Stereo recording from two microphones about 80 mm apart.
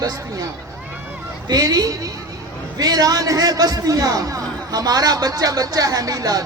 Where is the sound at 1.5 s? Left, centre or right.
Right.